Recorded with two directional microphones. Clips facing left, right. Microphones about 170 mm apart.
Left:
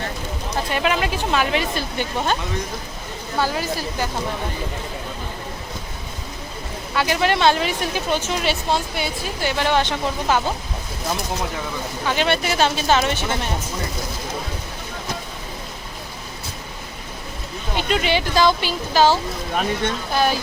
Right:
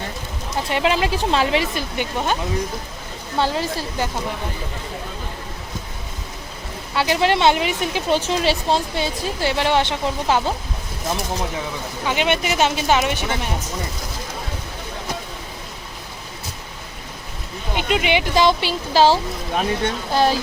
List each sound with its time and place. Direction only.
0.7 s a woman's voice: 25° right (ahead or behind)
2.1 s speech: 10° right (ahead or behind)
3.3 s a woman's voice: 25° right (ahead or behind)
6.9 s a woman's voice: 25° right (ahead or behind)
12.0 s speech: 15° right (ahead or behind)
17.7 s a woman's voice: 15° right (ahead or behind)
19.1 s speech: 10° right (ahead or behind)